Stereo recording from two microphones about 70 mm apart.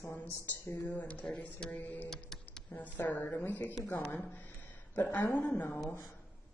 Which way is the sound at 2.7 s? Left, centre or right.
Left.